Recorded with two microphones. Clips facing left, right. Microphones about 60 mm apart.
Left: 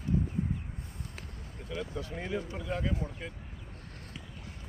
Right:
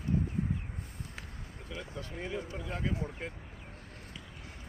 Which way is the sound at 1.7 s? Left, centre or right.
Right.